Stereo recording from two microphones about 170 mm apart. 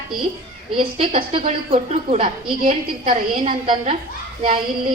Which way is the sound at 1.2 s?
30° right (ahead or behind).